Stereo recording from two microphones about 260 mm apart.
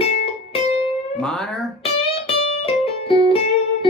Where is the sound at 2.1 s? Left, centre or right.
Left.